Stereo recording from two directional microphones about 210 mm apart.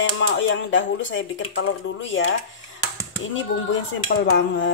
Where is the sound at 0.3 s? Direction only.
60° left (ahead or behind).